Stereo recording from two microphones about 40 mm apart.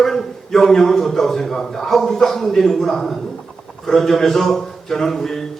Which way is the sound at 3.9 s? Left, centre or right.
Centre.